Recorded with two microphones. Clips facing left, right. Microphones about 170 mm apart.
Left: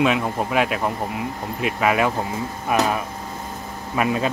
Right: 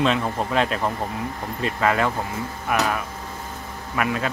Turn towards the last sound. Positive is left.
turn(degrees=20)  # may be behind; listen again after turning